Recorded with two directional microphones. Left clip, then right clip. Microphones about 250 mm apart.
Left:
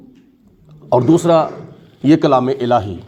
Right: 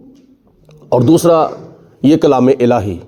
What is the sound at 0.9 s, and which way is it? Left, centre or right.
Speech, right.